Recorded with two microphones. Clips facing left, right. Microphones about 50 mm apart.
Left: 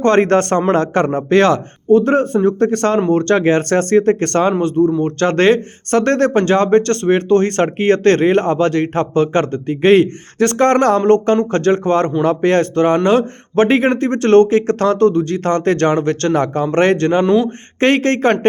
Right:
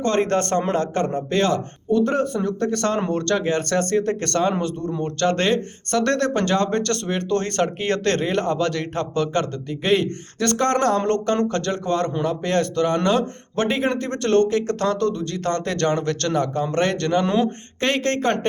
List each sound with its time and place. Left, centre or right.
0.0 s speech: left
3.3 s speech: left
16.3 s speech: left
17.2 s speech: centre
17.7 s speech: left